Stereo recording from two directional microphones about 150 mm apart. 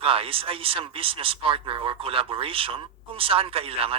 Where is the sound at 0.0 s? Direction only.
40° right (ahead or behind).